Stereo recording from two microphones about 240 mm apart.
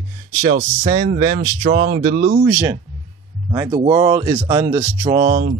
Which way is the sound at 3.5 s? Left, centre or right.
Centre.